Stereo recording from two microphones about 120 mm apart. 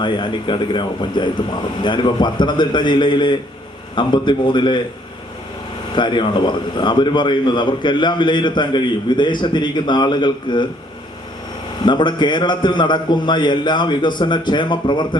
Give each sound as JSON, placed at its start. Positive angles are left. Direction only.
{"t": 0.0, "sound": "a man's voice", "side_deg": 40}
{"t": 5.9, "sound": "a man's voice", "side_deg": 40}
{"t": 11.9, "sound": "a man's voice", "side_deg": 40}